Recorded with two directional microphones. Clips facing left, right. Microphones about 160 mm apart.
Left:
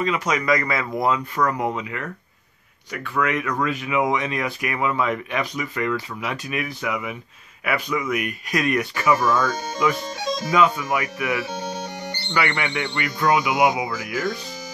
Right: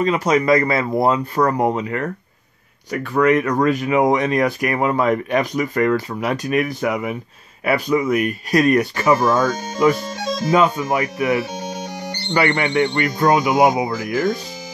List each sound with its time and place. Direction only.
0.0 s speech: 35° right (ahead or behind)
11.5 s music: 15° right (ahead or behind)
12.3 s speech: 35° right (ahead or behind)